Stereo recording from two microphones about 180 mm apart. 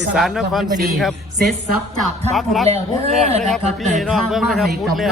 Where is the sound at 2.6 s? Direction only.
35° right (ahead or behind).